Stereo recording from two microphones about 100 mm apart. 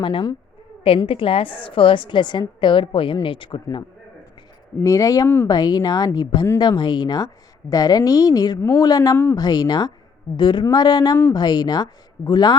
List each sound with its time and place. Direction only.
0.0 s speech: 55° left (ahead or behind)
0.9 s a woman's voice: 65° left (ahead or behind)
4.8 s a woman's voice: 35° left (ahead or behind)